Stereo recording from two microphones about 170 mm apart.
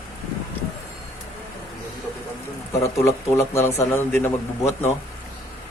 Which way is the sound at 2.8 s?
15° left (ahead or behind).